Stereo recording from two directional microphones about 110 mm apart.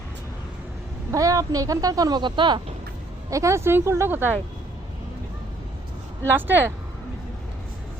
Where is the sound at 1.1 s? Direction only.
30° right (ahead or behind).